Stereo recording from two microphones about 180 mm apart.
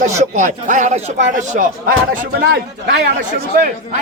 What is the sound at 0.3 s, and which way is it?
A man's voice, 45° right (ahead or behind).